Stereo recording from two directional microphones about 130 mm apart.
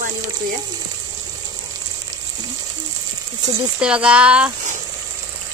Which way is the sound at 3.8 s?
10° right (ahead or behind).